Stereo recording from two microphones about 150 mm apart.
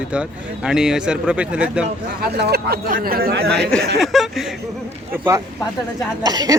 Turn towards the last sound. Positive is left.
turn(degrees=-25)  # may be behind; listen again after turning